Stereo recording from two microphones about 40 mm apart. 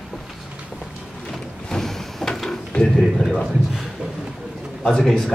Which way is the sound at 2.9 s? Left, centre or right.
Centre.